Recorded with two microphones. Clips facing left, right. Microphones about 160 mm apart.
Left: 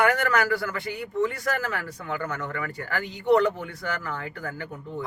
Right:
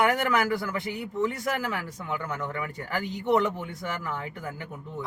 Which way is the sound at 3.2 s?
20° right (ahead or behind).